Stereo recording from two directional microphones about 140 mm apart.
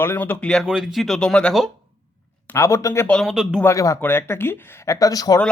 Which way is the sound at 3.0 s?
5° left (ahead or behind).